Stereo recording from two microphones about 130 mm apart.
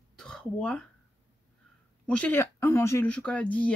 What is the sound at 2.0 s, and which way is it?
Speech, 10° left (ahead or behind).